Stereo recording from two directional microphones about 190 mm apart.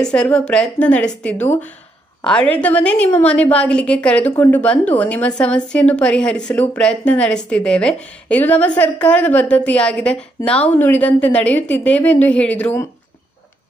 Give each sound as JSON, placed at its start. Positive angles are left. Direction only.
{"t": 0.0, "sound": "a woman's voice", "side_deg": 5}